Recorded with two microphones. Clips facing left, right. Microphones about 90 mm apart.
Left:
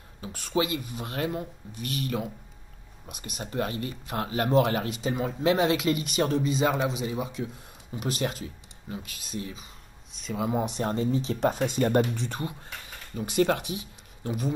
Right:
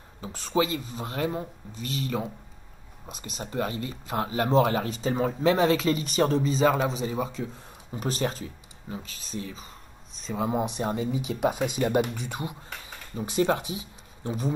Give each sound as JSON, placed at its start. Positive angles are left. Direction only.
{"t": 0.2, "sound": "speech", "side_deg": -30}
{"t": 13.1, "sound": "speech", "side_deg": -25}